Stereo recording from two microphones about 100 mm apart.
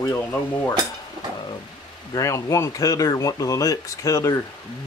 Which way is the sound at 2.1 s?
30° left (ahead or behind).